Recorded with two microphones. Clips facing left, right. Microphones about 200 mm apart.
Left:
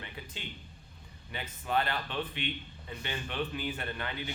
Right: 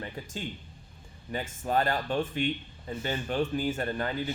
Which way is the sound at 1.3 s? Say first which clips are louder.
Right 4 dB; 40° right (ahead or behind).